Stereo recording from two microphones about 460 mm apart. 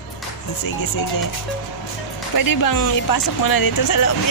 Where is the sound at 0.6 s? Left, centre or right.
Left.